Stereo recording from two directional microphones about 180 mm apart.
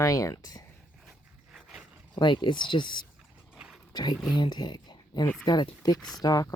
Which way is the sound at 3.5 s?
5° right (ahead or behind).